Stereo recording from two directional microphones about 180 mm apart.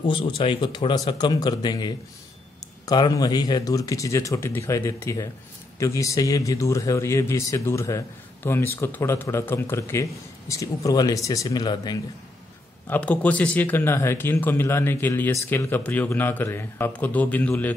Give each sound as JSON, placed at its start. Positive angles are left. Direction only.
{"t": 0.1, "sound": "speech", "side_deg": 30}
{"t": 12.8, "sound": "speech", "side_deg": 10}